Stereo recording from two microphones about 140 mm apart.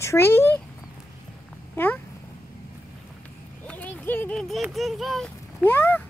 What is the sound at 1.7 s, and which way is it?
Speech, 15° left (ahead or behind).